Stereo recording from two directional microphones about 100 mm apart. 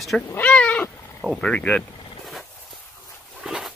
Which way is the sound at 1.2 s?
5° left (ahead or behind).